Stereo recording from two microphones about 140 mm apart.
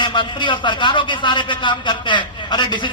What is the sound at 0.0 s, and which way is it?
A man's voice, 35° left (ahead or behind).